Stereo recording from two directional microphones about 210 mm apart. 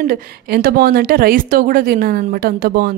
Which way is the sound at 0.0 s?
45° right (ahead or behind).